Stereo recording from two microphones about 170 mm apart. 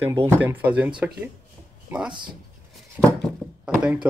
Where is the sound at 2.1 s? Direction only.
25° right (ahead or behind).